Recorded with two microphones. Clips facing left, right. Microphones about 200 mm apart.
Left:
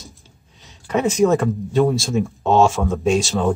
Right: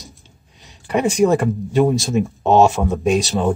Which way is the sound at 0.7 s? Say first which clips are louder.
Right 1 dB; 15° right (ahead or behind).